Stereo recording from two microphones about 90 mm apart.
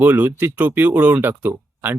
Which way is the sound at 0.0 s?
20° right (ahead or behind).